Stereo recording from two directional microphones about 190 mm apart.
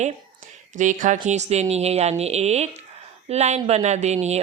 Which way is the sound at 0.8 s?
40° right (ahead or behind).